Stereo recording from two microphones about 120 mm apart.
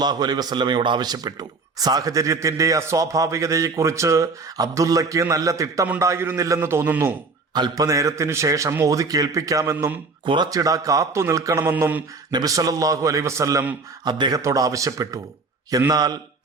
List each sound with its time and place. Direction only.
0.0 s a man's voice: 35° right (ahead or behind); by 7.1 s 15° right (ahead or behind)
7.5 s a man's voice: 35° right (ahead or behind)
9.7 s mantra: 15° right (ahead or behind)
10.2 s a man's voice: 40° right (ahead or behind)
11.6 s mantra: 15° right (ahead or behind)
12.3 s a man's voice: 30° right (ahead or behind)